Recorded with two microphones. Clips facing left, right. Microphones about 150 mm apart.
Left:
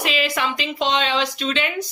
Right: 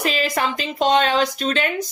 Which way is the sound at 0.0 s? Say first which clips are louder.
Right 1 dB; 40° right (ahead or behind).